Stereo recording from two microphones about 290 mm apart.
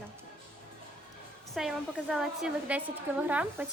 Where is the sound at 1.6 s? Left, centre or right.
Centre.